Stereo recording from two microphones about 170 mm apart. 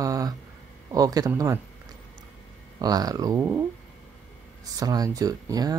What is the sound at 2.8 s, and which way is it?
Speech, 20° right (ahead or behind).